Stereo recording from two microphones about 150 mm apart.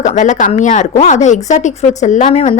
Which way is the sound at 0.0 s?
55° left (ahead or behind).